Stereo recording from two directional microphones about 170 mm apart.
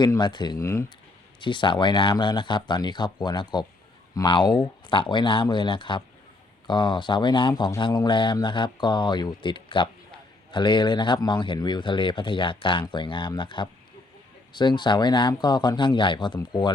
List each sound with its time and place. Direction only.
0.0 s speech: 25° left (ahead or behind)
1.4 s speech: 30° left (ahead or behind)